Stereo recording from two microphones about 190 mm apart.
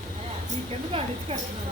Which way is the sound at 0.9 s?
30° right (ahead or behind).